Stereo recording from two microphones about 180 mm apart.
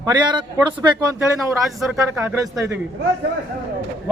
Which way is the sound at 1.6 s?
Centre (ahead or behind).